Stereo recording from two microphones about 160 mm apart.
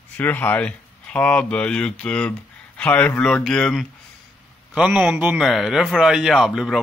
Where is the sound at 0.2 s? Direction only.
10° left (ahead or behind).